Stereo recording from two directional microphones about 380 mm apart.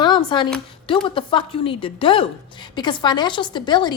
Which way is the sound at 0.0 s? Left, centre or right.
Centre.